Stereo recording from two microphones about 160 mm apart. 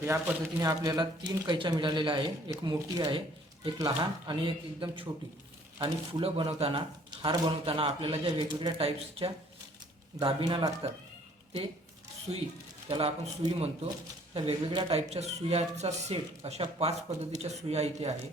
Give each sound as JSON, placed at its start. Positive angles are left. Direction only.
{"t": 0.0, "sound": "speech", "side_deg": -15}
{"t": 12.3, "sound": "speech", "side_deg": -35}
{"t": 14.3, "sound": "speech", "side_deg": -30}